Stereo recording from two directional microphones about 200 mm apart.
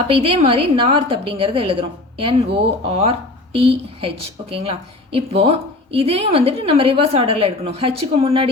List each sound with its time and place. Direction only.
0.1 s speech: 30° right (ahead or behind)